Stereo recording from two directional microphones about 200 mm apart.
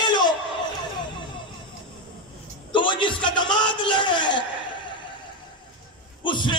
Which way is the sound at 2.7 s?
25° left (ahead or behind).